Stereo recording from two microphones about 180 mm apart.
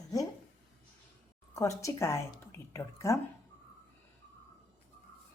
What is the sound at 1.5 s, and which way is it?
A woman's voice, 15° left (ahead or behind).